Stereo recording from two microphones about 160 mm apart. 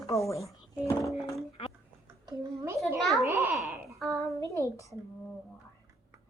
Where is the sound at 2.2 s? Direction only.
20° right (ahead or behind).